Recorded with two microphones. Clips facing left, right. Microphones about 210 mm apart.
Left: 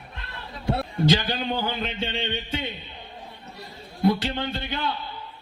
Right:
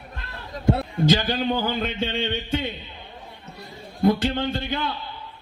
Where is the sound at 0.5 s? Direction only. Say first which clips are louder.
Right 4 dB; 45° right (ahead or behind).